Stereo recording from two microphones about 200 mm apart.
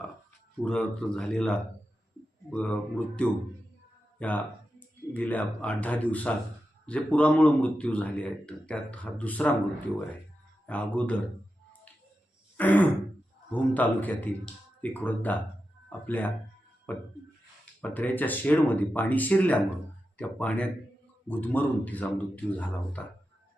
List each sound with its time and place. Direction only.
0.6 s a man's voice: 5° left (ahead or behind)
12.5 s throat clearing: 10° left (ahead or behind)
13.5 s a man's voice: 10° left (ahead or behind)